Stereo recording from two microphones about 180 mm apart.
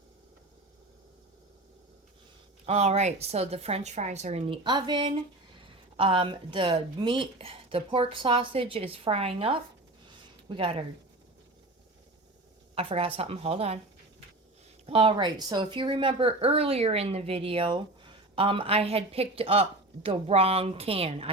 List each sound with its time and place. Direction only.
2.6 s a woman's voice: 35° right (ahead or behind)
12.7 s a woman's voice: 35° right (ahead or behind)
14.8 s a woman's voice: 30° right (ahead or behind)